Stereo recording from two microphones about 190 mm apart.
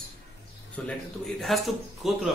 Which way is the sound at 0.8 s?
5° left (ahead or behind).